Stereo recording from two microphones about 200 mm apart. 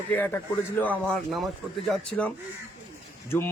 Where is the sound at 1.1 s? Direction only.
Centre (ahead or behind).